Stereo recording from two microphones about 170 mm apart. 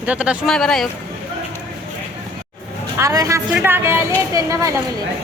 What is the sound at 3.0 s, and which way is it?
Music, 20° right (ahead or behind).